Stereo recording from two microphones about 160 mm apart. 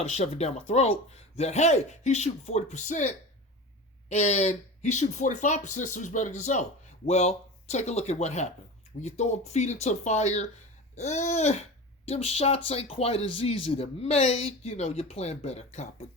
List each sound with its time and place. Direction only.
0.0 s speech: 40° left (ahead or behind)